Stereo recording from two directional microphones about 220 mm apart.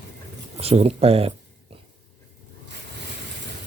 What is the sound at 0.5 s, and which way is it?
Speech, 30° right (ahead or behind).